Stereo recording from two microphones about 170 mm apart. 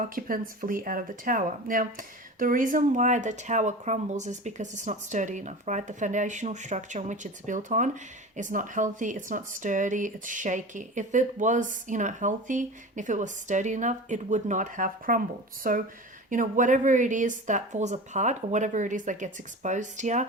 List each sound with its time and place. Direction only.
0.0 s speech: 55° right (ahead or behind)